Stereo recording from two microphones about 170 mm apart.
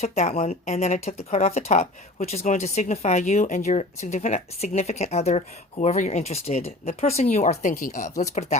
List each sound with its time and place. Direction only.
0.0 s a woman's voice: 40° left (ahead or behind)